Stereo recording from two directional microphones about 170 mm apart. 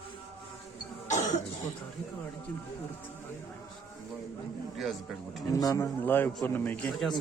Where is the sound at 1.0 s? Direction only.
45° left (ahead or behind).